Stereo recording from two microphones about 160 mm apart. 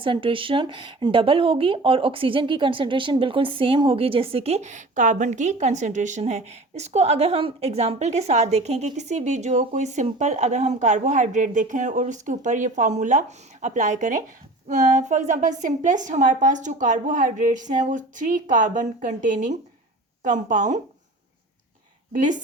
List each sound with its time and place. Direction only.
0.0 s speech: 30° right (ahead or behind); by 20.8 s 50° right (ahead or behind)
22.1 s speech: 55° right (ahead or behind)